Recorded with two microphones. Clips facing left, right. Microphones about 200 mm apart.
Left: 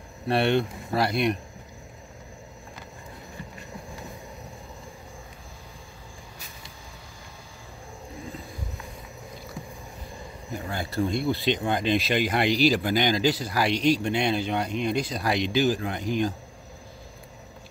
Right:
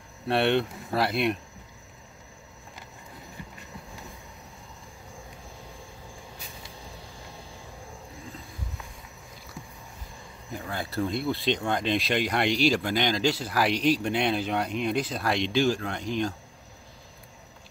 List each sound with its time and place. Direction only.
0.3 s speech: centre (ahead or behind)
10.7 s speech: centre (ahead or behind)